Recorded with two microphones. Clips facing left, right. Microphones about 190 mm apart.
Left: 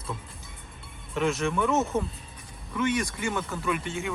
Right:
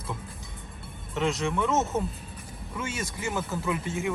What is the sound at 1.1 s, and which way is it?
Speech, 20° right (ahead or behind).